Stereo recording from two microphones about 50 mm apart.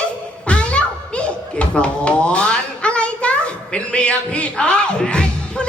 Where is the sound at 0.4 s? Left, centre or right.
Left.